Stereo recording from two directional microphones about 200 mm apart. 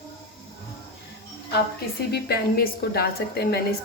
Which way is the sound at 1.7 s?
50° left (ahead or behind).